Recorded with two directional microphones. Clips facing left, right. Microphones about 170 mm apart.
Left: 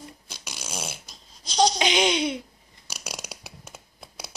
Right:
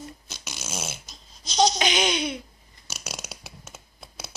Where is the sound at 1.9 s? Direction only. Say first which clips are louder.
Left 2 dB; 25° left (ahead or behind).